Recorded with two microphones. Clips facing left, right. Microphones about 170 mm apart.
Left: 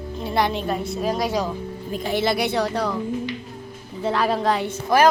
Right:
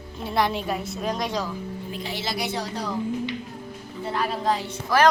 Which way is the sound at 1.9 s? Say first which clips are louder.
Left 10 dB; 50° left (ahead or behind).